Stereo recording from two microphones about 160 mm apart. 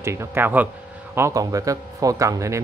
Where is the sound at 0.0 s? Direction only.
15° right (ahead or behind).